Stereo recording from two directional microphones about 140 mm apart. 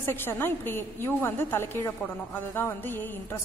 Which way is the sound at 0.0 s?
15° left (ahead or behind).